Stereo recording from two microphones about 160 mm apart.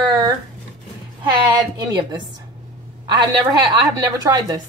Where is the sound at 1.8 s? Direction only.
25° right (ahead or behind).